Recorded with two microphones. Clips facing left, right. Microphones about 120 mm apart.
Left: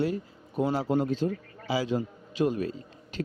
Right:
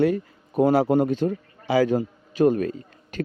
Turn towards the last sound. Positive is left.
turn(degrees=-55)  # may be behind; listen again after turning